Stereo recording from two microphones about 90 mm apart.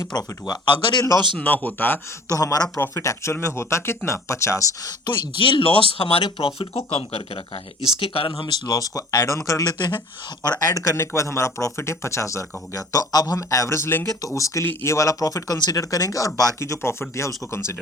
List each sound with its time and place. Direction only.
0.0 s speech: 50° left (ahead or behind)
1.4 s speech: 20° left (ahead or behind)
2.3 s speech: 40° left (ahead or behind); by 6.2 s 90° left
6.2 s speech: 75° left (ahead or behind)
7.9 s speech: 90° left
8.3 s speech: 50° left (ahead or behind)
14.7 s speech: 25° left (ahead or behind)
14.9 s speech: 40° left (ahead or behind)